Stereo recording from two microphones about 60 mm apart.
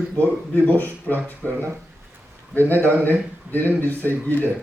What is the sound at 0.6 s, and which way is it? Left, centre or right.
Speech, left.